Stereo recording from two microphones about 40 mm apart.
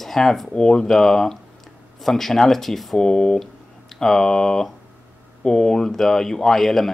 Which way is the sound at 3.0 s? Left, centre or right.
Centre.